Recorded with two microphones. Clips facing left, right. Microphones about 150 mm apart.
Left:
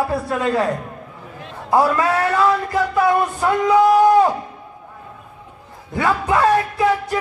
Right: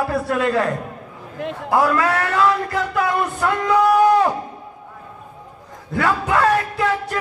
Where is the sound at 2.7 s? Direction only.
20° left (ahead or behind).